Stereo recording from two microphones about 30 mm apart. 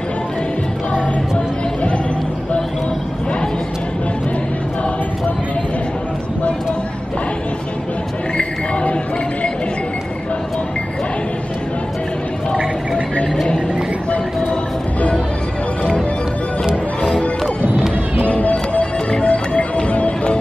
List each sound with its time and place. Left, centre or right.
16.6 s music: right
18.2 s music: left